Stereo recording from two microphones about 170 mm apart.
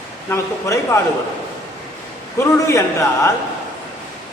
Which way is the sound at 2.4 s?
15° left (ahead or behind).